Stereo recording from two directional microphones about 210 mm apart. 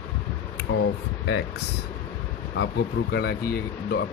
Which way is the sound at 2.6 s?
50° left (ahead or behind).